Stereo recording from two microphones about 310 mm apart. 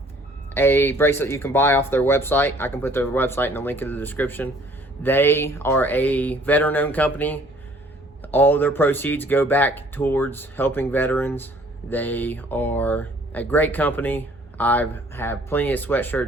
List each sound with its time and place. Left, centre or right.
0.5 s speech: centre